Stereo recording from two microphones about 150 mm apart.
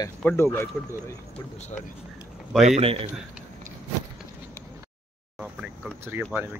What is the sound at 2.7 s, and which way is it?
Speech, 40° right (ahead or behind).